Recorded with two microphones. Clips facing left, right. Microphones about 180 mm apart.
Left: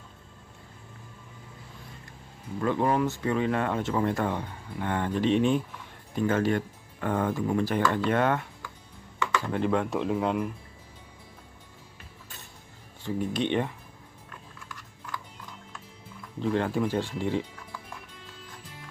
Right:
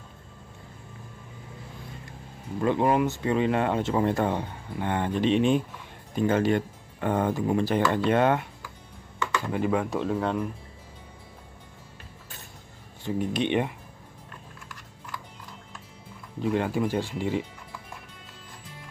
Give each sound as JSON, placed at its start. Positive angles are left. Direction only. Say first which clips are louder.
{"t": 2.6, "sound": "speech", "louder": "right 2 dB", "side_deg": -20}
{"t": 9.5, "sound": "speech", "louder": "right 1 dB", "side_deg": -5}
{"t": 13.0, "sound": "speech", "louder": "right 2 dB", "side_deg": -15}
{"t": 16.3, "sound": "speech", "louder": "right 1 dB", "side_deg": -10}